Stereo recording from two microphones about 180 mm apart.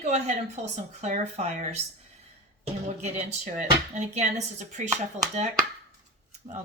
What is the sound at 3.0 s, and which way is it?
Speech, 40° right (ahead or behind).